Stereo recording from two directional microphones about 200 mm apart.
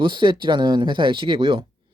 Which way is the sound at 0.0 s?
25° right (ahead or behind).